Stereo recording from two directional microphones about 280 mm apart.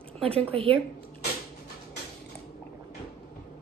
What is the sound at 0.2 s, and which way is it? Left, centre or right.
Speech, centre.